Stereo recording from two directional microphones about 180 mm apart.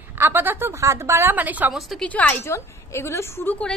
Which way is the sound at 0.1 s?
10° right (ahead or behind).